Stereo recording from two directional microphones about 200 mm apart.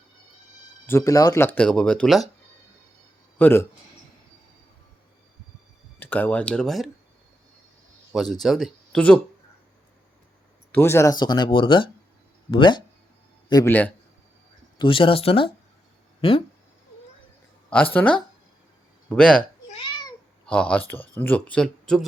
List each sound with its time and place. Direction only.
0.9 s speech: 15° left (ahead or behind)
3.3 s speech: 10° left (ahead or behind)
6.0 s speech: 10° left (ahead or behind)
8.1 s speech: centre (ahead or behind)
10.7 s speech: 10° left (ahead or behind)
14.8 s speech: 25° left (ahead or behind)
17.9 s speech: 5° left (ahead or behind)
19.4 s a sound: 25° left (ahead or behind)
20.5 s speech: 5° left (ahead or behind)